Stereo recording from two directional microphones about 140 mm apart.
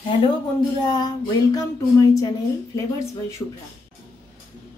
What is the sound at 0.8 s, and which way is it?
Speech, 30° left (ahead or behind).